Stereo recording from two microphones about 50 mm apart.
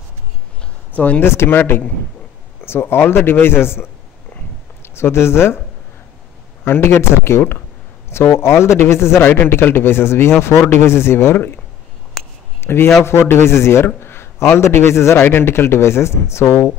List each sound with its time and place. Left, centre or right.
0.9 s speech: left
1.2 s speech: left
2.6 s a man's voice: left
6.6 s speech: left
9.2 s a man's voice: left
12.5 s a man's voice: left
13.9 s a man's voice: left
15.2 s speech: left